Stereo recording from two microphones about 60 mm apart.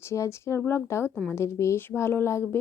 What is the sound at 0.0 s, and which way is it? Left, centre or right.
Speech, left.